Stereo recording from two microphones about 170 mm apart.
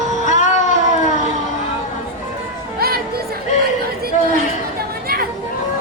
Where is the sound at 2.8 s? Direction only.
65° right (ahead or behind).